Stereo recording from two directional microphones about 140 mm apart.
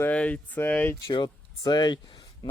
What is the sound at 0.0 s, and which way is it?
Speech, 10° left (ahead or behind).